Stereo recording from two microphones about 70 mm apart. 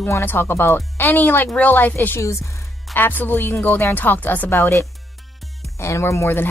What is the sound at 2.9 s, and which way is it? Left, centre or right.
Speech, left.